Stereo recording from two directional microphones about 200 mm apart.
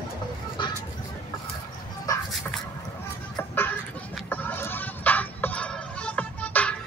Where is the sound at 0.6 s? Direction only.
25° left (ahead or behind).